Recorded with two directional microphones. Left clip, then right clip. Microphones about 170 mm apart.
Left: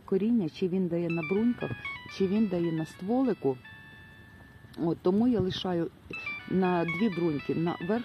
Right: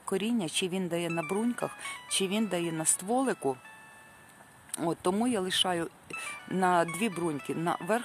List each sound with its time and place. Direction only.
0.0 s speech: 25° right (ahead or behind)
4.7 s speech: 35° right (ahead or behind)